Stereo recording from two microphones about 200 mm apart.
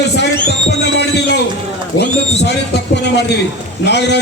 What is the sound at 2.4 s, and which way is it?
A man's voice, 60° left (ahead or behind).